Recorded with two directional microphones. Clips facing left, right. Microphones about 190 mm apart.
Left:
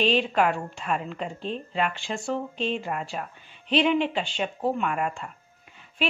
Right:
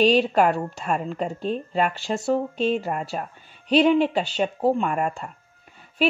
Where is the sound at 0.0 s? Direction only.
40° right (ahead or behind).